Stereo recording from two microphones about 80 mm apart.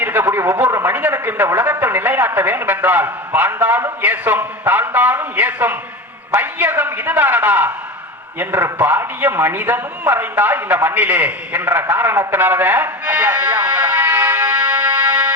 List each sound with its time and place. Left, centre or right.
0.0 s a sound: right
0.7 s a man's voice: right
8.9 s a man's voice: right
12.3 s music: right